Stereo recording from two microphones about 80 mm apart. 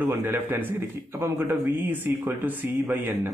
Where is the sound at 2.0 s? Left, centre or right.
Right.